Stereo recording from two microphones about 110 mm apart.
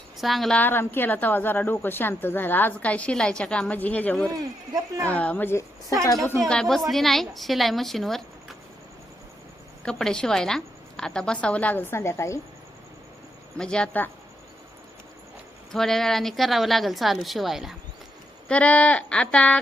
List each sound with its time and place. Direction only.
0.2 s a woman's voice: centre (ahead or behind)
0.6 s a woman's voice: 20° left (ahead or behind)
6.4 s a woman's voice: 5° left (ahead or behind)
9.8 s a woman's voice: 5° left (ahead or behind); by 12.4 s 25° left (ahead or behind)
13.6 s a woman's voice: 10° left (ahead or behind)
15.7 s a woman's voice: 5° left (ahead or behind)
18.4 s a woman's voice: 10° left (ahead or behind)